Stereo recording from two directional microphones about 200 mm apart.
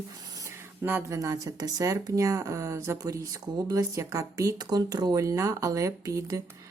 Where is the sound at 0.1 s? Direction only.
15° right (ahead or behind).